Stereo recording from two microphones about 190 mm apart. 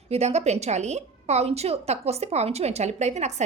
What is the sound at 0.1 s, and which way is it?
A woman's voice, 35° right (ahead or behind).